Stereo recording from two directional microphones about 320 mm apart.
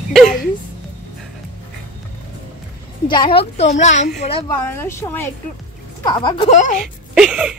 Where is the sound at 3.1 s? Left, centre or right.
Centre.